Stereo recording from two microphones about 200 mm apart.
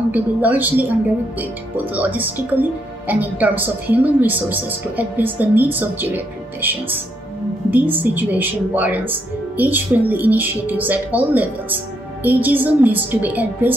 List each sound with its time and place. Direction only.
0.1 s a woman's voice: 10° right (ahead or behind)
2.0 s a woman's voice: 10° right (ahead or behind)